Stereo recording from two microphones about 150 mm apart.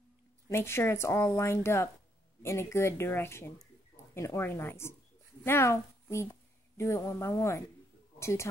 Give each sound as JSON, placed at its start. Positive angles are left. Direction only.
{"t": 0.5, "sound": "a woman's voice", "side_deg": 15}